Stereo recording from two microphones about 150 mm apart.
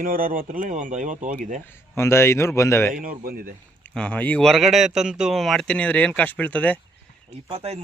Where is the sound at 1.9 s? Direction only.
15° left (ahead or behind).